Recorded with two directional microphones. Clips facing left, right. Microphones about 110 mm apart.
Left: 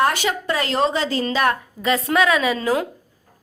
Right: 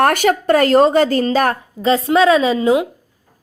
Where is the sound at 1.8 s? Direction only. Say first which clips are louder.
Right 6 dB; 30° right (ahead or behind).